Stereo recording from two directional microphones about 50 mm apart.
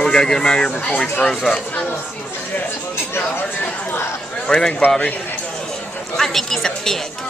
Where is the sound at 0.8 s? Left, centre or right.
Left.